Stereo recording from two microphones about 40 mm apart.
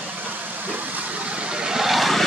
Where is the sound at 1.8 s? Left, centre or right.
Centre.